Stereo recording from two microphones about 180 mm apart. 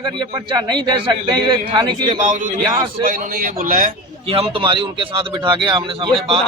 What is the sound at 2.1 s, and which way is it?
A man's voice, 45° right (ahead or behind).